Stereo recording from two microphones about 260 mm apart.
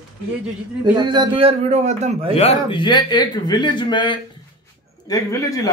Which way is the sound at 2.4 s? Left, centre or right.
Left.